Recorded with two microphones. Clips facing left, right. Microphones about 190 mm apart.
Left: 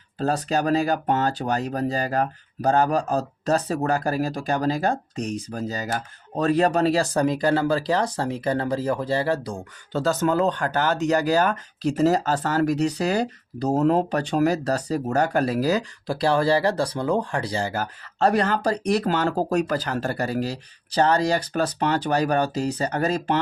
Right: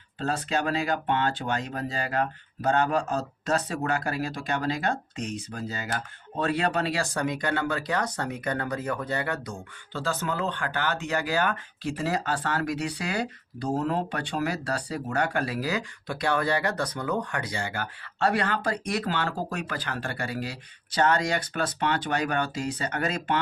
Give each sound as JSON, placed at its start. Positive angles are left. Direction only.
{"t": 0.3, "sound": "speech", "side_deg": 40}
{"t": 13.7, "sound": "speech", "side_deg": 40}